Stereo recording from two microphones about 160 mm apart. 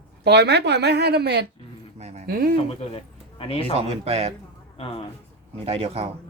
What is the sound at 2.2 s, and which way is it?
Speech, 65° right (ahead or behind).